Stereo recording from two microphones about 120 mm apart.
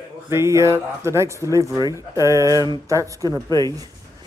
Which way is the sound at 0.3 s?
20° right (ahead or behind).